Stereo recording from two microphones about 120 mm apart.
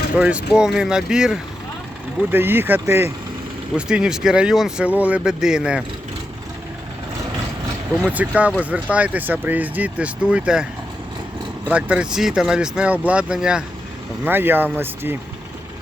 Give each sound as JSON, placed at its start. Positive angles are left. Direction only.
{"t": 0.2, "sound": "speech", "side_deg": -10}
{"t": 2.3, "sound": "speech", "side_deg": -20}
{"t": 3.8, "sound": "speech", "side_deg": -10}
{"t": 8.1, "sound": "speech", "side_deg": -10}
{"t": 11.7, "sound": "speech", "side_deg": -10}
{"t": 14.3, "sound": "speech", "side_deg": -15}